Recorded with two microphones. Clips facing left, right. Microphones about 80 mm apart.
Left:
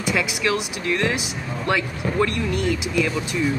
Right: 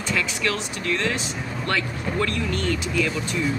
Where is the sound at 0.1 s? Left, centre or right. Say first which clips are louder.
Left 3 dB; centre.